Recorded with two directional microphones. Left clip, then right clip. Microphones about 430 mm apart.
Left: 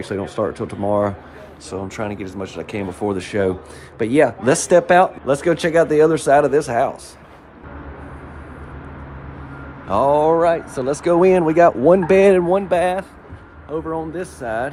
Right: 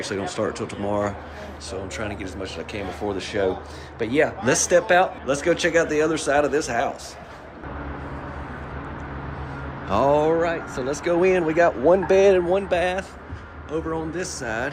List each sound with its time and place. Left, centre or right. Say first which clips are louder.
0.0 s speech: left 3 dB; centre
9.9 s a man's voice: left 4 dB; centre